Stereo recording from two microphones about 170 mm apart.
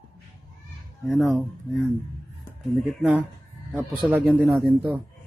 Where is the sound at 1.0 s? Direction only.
Centre (ahead or behind).